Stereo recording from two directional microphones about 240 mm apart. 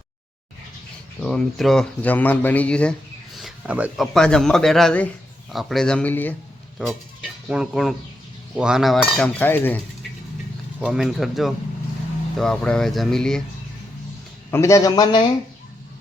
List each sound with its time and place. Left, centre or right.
1.2 s speech: centre
10.8 s speech: centre
14.5 s a man's voice: centre